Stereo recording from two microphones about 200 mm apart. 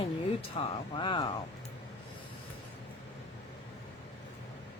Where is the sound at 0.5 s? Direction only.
25° left (ahead or behind).